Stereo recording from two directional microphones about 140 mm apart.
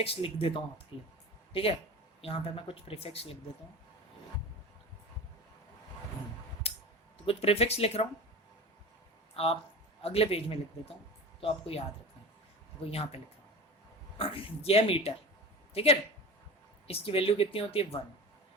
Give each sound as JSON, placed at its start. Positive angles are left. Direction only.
{"t": 0.0, "sound": "speech", "side_deg": 40}
{"t": 2.2, "sound": "a woman's voice", "side_deg": 40}
{"t": 6.6, "sound": "a sound", "side_deg": 45}
{"t": 7.3, "sound": "a woman's voice", "side_deg": 45}
{"t": 9.3, "sound": "a woman's voice", "side_deg": 45}
{"t": 12.8, "sound": "a woman's voice", "side_deg": 45}
{"t": 14.2, "sound": "a woman's voice", "side_deg": 45}